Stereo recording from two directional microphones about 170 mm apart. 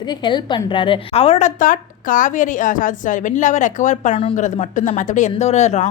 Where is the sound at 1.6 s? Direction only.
50° left (ahead or behind).